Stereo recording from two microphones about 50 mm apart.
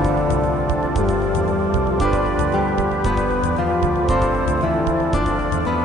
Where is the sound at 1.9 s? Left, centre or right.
Centre.